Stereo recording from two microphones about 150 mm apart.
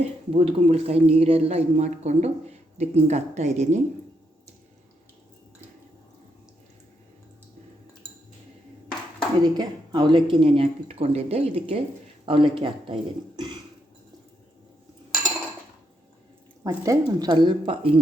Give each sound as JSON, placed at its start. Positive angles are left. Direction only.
{"t": 0.0, "sound": "speech", "side_deg": -40}
{"t": 9.4, "sound": "speech", "side_deg": -30}
{"t": 16.6, "sound": "speech", "side_deg": -25}